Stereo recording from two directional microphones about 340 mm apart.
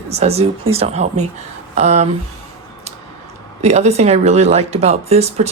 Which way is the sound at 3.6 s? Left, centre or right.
Centre.